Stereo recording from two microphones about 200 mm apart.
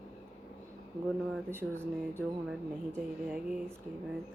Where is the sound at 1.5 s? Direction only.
10° right (ahead or behind).